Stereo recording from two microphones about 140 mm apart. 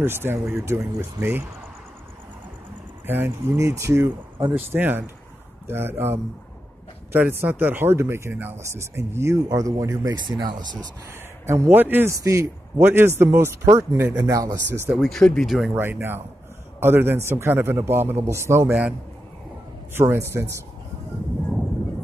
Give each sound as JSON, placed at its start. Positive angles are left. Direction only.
{"t": 0.0, "sound": "a man's voice", "side_deg": -15}
{"t": 3.1, "sound": "a man's voice", "side_deg": -15}
{"t": 11.4, "sound": "a man's voice", "side_deg": -20}
{"t": 14.9, "sound": "speech", "side_deg": 0}
{"t": 15.7, "sound": "a man's voice", "side_deg": -15}